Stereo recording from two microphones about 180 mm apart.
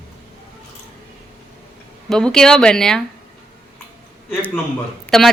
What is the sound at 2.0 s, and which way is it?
Speech, 5° left (ahead or behind).